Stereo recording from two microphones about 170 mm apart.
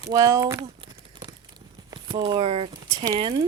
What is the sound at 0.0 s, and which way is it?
Speech, 20° right (ahead or behind).